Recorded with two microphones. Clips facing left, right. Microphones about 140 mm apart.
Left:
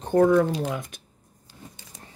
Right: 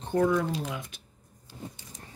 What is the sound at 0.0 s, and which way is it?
Speech, 50° left (ahead or behind).